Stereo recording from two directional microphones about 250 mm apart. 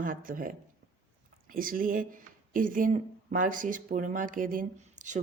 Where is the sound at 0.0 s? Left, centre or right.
Right.